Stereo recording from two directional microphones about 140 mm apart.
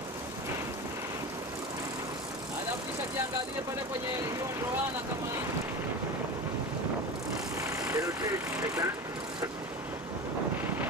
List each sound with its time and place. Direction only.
7.6 s vehicle: 25° right (ahead or behind)